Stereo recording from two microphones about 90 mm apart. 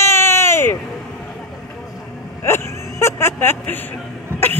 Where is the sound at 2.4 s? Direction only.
30° left (ahead or behind).